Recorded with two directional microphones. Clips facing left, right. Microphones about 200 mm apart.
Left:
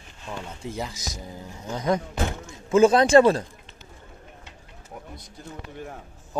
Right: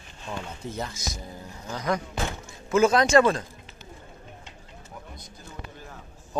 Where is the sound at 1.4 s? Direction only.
20° left (ahead or behind).